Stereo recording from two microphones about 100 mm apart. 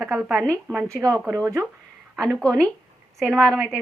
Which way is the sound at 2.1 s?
5° left (ahead or behind).